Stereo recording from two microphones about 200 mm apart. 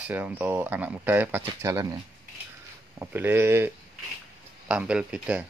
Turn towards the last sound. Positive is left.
turn(degrees=-5)  # may be behind; listen again after turning